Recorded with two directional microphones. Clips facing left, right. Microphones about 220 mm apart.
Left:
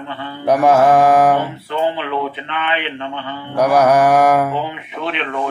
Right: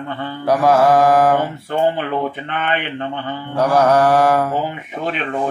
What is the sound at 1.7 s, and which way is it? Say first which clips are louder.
Speech: right 2 dB; 45° right (ahead or behind).